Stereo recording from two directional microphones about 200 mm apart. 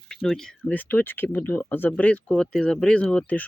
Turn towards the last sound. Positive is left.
turn(degrees=5)  # may be behind; listen again after turning